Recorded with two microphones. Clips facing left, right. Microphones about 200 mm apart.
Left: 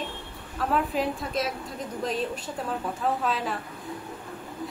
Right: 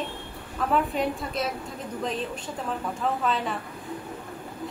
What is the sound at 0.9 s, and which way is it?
Speech, centre (ahead or behind).